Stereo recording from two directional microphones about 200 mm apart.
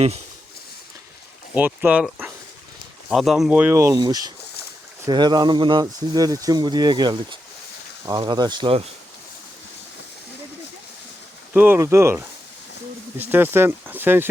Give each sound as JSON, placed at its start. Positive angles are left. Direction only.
{"t": 1.5, "sound": "speech", "side_deg": -10}
{"t": 11.5, "sound": "speech", "side_deg": -10}